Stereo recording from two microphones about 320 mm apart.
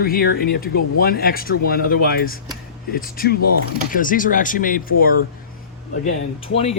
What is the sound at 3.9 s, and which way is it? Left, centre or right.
Speech, left.